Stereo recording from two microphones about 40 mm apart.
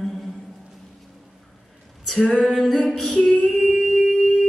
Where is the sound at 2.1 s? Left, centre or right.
Left.